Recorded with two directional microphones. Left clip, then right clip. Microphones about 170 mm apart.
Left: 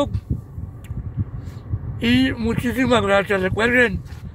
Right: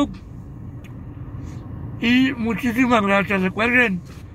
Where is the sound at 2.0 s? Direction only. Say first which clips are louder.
Even; 15° left (ahead or behind).